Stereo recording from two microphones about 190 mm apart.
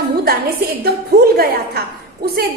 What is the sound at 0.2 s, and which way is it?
A woman's voice, 55° right (ahead or behind).